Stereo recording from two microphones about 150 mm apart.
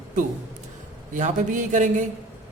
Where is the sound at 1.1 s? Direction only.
60° right (ahead or behind).